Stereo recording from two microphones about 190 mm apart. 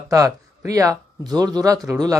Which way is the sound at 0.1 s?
15° right (ahead or behind).